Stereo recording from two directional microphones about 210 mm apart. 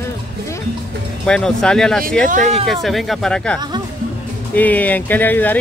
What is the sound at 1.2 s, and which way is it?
Speech, 5° left (ahead or behind).